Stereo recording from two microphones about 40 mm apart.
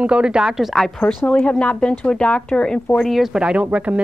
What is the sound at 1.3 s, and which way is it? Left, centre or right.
Speech, left.